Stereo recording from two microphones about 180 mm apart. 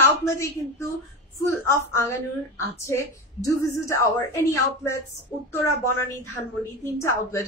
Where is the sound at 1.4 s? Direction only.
15° left (ahead or behind).